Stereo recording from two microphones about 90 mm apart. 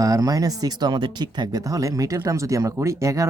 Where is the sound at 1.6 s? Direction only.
40° right (ahead or behind).